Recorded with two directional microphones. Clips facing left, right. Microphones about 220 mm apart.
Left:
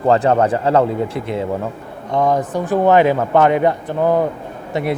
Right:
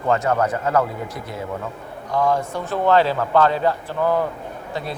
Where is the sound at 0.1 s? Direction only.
30° left (ahead or behind).